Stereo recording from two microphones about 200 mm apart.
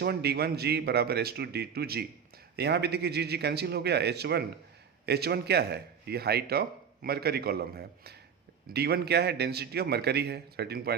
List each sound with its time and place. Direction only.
0.0 s a man's voice: 55° right (ahead or behind)